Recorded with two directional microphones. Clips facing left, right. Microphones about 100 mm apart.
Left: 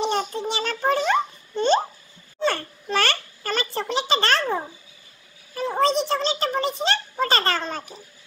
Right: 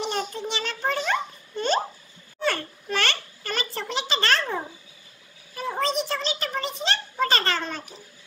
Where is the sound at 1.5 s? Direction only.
25° left (ahead or behind).